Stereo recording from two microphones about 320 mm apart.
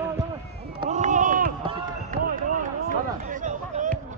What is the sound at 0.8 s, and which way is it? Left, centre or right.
Run, right.